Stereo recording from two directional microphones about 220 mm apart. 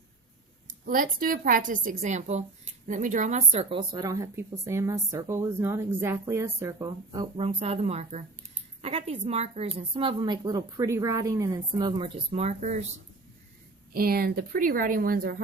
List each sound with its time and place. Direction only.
0.9 s a woman's voice: 40° right (ahead or behind)
13.9 s a woman's voice: 40° right (ahead or behind)